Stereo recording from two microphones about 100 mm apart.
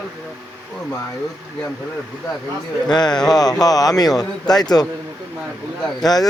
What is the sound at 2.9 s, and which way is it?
A man's voice, 45° left (ahead or behind).